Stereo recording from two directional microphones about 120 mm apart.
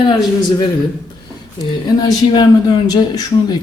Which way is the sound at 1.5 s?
30° left (ahead or behind).